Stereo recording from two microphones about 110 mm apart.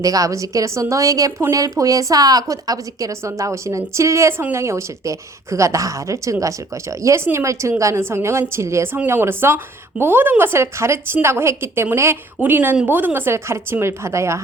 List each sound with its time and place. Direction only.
0.0 s a woman's voice: 30° right (ahead or behind)